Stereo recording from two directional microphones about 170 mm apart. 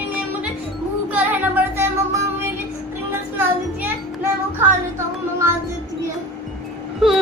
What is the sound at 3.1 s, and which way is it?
Music, 10° right (ahead or behind).